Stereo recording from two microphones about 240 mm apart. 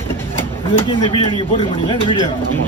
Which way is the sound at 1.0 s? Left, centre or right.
Left.